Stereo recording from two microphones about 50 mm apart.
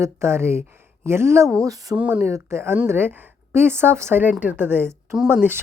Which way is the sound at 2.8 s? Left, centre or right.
Right.